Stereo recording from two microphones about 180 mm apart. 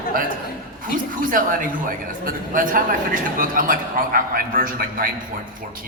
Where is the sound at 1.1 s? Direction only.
50° right (ahead or behind).